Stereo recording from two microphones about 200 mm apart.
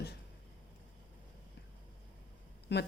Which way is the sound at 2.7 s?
55° left (ahead or behind).